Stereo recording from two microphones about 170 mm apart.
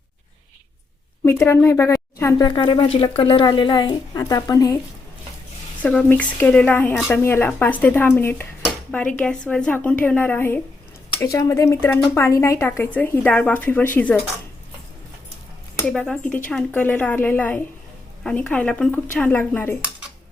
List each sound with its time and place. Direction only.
1.2 s speech: 15° left (ahead or behind)
5.8 s speech: 10° left (ahead or behind)
15.9 s speech: 5° left (ahead or behind)